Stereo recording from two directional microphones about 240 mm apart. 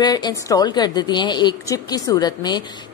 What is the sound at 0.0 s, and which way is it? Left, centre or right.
A woman's voice, centre.